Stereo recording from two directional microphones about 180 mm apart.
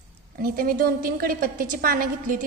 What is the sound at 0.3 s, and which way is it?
A woman's voice, 55° right (ahead or behind).